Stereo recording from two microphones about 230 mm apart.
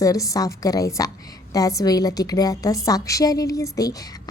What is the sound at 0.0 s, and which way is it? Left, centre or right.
A woman's voice, centre.